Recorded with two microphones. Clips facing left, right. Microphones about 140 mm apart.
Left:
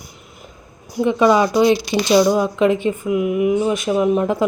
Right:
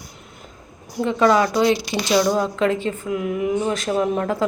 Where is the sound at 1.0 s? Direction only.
15° left (ahead or behind).